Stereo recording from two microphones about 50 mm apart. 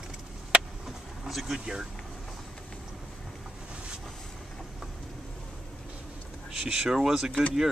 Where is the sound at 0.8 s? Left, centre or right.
Centre.